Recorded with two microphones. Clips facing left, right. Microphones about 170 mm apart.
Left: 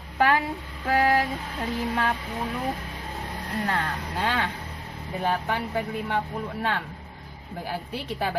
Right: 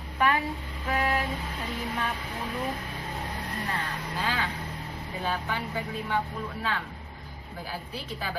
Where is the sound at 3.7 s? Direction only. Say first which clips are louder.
Left 5 dB; 75° left (ahead or behind).